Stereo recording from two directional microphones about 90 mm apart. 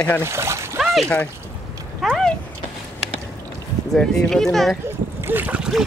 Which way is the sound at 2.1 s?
5° left (ahead or behind).